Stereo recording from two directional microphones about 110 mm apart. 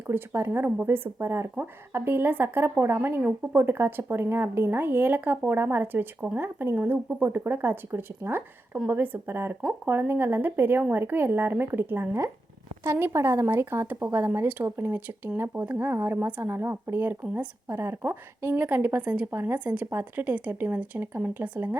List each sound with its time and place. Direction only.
0.1 s speech: 25° right (ahead or behind)
9.6 s a woman's voice: 5° right (ahead or behind)
9.9 s a woman's voice: 20° right (ahead or behind)